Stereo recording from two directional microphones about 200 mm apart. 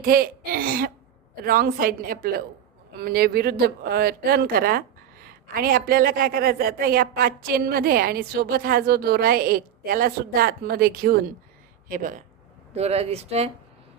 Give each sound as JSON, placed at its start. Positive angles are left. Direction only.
{"t": 0.0, "sound": "a woman's voice", "side_deg": -45}
{"t": 12.7, "sound": "speech", "side_deg": -30}